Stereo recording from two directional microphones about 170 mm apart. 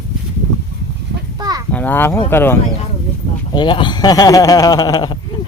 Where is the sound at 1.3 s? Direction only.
25° right (ahead or behind).